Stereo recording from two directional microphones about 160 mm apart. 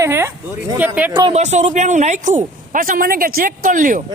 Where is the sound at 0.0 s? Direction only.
15° right (ahead or behind).